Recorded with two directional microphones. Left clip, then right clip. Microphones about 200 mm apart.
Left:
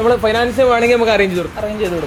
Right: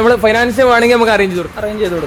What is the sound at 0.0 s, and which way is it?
A man's voice, 40° right (ahead or behind).